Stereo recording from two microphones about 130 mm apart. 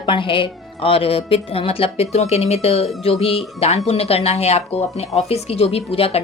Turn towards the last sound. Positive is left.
turn(degrees=50)  # may be behind; listen again after turning